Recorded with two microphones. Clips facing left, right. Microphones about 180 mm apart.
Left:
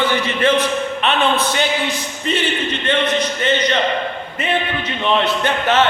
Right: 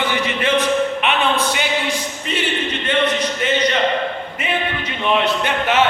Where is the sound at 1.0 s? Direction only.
10° right (ahead or behind).